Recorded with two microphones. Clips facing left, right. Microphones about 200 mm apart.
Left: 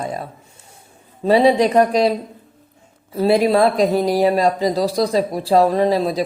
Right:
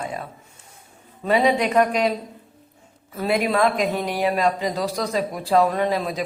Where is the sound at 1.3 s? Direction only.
35° left (ahead or behind).